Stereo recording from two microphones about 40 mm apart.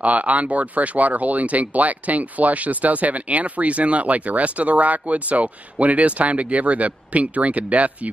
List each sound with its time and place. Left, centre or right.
0.0 s speech: right